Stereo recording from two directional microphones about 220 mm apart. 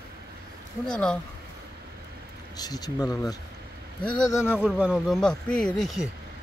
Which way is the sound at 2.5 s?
15° left (ahead or behind).